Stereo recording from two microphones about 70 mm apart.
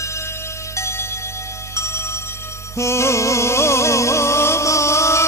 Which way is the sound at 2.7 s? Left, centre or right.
Left.